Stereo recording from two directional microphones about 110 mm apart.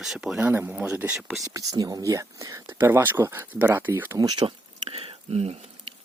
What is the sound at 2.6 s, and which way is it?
Speech, 20° right (ahead or behind).